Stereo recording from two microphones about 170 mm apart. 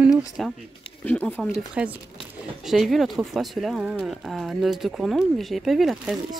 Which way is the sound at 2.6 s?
Centre (ahead or behind).